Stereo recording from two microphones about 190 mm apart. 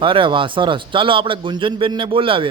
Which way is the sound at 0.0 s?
25° right (ahead or behind).